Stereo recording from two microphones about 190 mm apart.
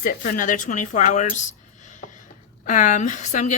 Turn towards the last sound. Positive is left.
turn(degrees=40)  # may be behind; listen again after turning